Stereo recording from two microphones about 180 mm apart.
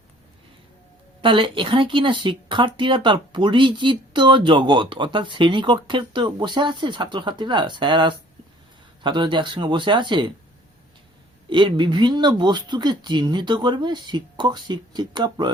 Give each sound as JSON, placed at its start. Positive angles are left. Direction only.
{"t": 1.2, "sound": "speech", "side_deg": -30}
{"t": 11.4, "sound": "speech", "side_deg": -25}